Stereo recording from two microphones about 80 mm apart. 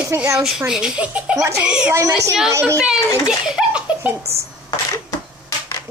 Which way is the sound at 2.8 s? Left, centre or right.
Centre.